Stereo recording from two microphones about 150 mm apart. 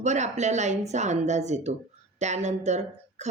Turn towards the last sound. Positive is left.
turn(degrees=-50)  # may be behind; listen again after turning